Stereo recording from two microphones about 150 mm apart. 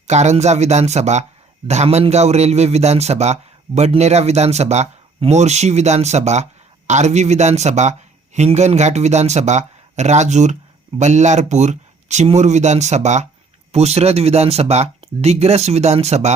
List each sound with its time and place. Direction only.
0.1 s speech: 50° right (ahead or behind)